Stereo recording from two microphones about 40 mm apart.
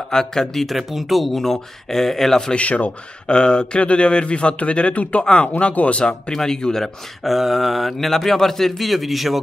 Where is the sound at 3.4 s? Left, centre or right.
Left.